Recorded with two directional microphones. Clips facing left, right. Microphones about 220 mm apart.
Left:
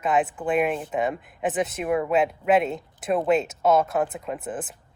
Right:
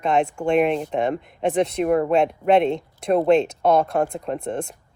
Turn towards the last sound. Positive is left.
turn(degrees=5)  # may be behind; listen again after turning